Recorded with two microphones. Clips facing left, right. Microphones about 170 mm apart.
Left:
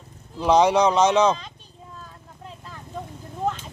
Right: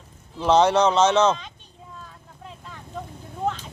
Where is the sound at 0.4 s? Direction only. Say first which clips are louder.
Even; 10° left (ahead or behind).